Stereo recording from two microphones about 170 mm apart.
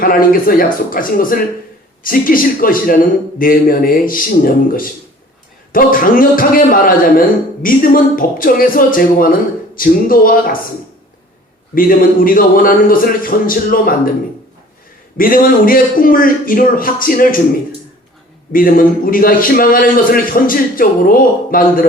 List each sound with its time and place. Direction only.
0.0 s a man's voice: 55° left (ahead or behind)
11.7 s a man's voice: 55° left (ahead or behind)
15.2 s a man's voice: 55° left (ahead or behind)
18.5 s a man's voice: 55° left (ahead or behind)